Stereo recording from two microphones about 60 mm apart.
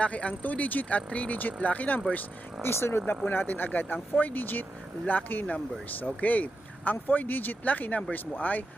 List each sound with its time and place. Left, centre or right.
0.0 s speech: left
2.6 s speech: left
3.2 s speech: left